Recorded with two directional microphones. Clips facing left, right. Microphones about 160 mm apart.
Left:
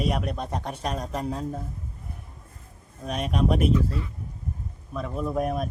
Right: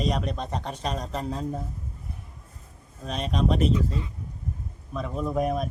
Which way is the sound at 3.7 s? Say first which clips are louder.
Left 2 dB; 15° right (ahead or behind).